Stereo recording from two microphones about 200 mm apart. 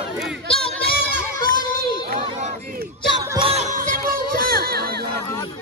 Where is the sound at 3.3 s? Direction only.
25° right (ahead or behind).